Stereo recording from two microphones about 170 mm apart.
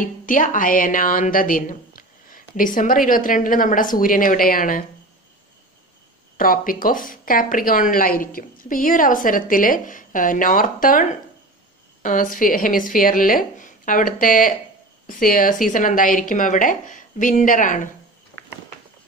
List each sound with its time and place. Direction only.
0.0 s a woman's voice: 50° left (ahead or behind)
6.3 s a woman's voice: 55° left (ahead or behind)